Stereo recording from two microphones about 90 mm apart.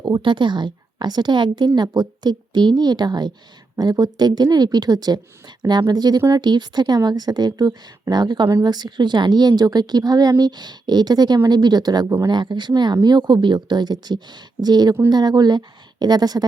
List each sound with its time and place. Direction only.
0.0 s a woman's voice: 60° right (ahead or behind)